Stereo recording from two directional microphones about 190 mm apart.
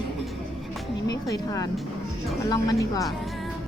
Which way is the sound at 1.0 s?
20° left (ahead or behind).